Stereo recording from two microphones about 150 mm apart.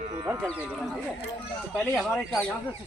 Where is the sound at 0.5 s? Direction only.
10° right (ahead or behind).